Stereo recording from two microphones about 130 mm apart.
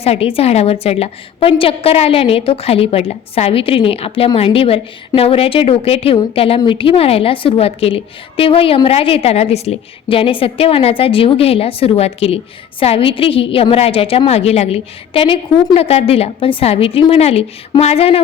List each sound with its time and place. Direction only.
0.0 s a woman's voice: 50° left (ahead or behind)